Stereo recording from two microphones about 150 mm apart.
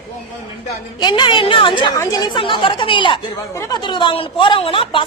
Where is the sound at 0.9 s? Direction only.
30° left (ahead or behind).